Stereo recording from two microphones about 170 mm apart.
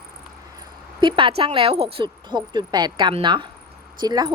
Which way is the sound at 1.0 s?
30° right (ahead or behind).